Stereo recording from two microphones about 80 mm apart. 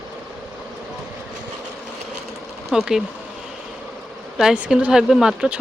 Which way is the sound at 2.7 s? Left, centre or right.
Centre.